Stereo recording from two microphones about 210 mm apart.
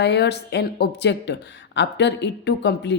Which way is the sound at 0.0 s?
55° left (ahead or behind).